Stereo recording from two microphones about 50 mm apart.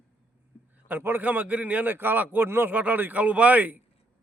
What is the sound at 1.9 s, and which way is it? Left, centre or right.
Speech, right.